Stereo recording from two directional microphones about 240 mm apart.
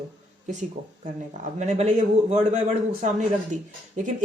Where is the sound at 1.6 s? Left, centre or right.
Right.